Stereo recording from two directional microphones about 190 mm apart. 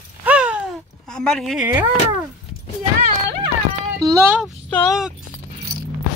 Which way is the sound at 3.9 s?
20° right (ahead or behind).